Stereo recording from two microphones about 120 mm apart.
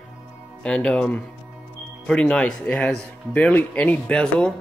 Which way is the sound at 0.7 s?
5° left (ahead or behind).